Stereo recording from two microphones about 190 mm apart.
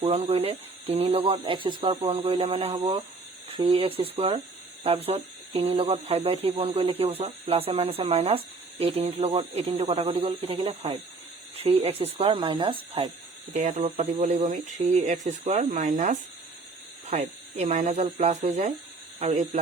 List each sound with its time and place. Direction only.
0.0 s speech: 35° right (ahead or behind)